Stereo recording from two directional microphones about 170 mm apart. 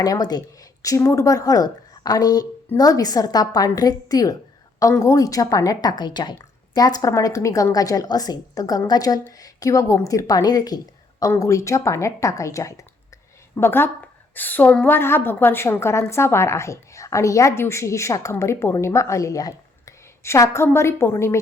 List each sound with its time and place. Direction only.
0.0 s a woman's voice: 20° left (ahead or behind)